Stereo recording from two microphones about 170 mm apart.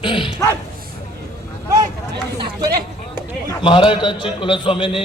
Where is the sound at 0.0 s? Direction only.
30° left (ahead or behind).